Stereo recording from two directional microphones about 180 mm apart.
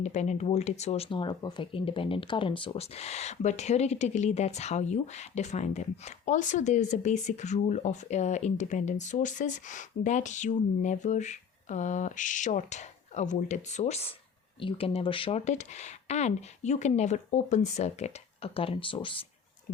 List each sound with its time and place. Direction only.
0.0 s speech: 40° left (ahead or behind)